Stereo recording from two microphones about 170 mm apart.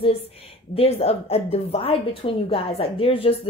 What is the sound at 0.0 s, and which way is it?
A woman's voice, 35° left (ahead or behind).